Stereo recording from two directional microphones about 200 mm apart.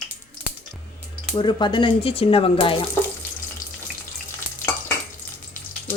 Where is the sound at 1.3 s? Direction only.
25° left (ahead or behind).